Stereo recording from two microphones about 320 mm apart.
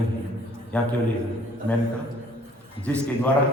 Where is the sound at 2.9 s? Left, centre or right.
Centre.